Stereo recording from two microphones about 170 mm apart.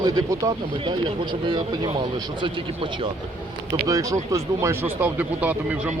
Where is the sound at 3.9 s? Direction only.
20° right (ahead or behind).